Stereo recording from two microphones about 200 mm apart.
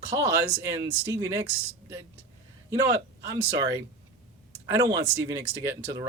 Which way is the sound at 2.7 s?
15° right (ahead or behind).